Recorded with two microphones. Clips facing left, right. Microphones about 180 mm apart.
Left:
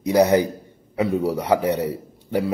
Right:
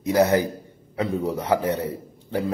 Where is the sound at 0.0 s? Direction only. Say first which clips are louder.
Left 3 dB; 20° left (ahead or behind).